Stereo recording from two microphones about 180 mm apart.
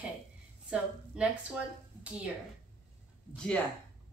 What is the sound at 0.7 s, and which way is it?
A woman's voice, 5° right (ahead or behind).